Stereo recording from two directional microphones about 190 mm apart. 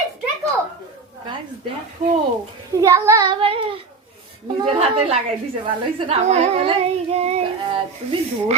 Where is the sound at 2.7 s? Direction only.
20° right (ahead or behind).